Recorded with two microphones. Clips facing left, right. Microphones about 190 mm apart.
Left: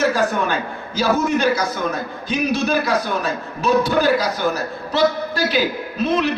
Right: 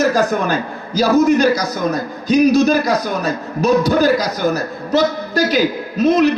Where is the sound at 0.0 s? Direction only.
40° right (ahead or behind).